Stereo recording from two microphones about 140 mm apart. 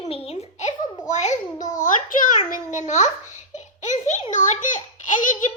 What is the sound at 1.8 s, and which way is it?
Speech, 75° left (ahead or behind).